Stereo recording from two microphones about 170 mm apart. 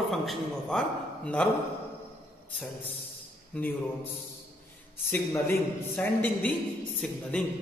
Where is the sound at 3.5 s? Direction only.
10° left (ahead or behind).